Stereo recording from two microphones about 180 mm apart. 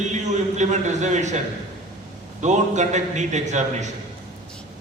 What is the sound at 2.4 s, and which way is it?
A man's voice, 40° right (ahead or behind).